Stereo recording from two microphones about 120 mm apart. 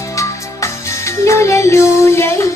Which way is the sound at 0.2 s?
25° left (ahead or behind).